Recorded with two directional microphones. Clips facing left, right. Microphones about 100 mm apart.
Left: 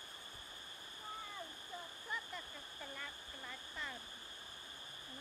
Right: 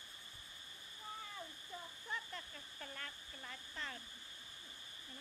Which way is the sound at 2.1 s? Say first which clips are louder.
Even; 5° left (ahead or behind).